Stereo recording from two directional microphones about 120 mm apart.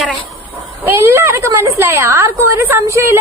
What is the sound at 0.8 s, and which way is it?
A woman's voice, 20° right (ahead or behind).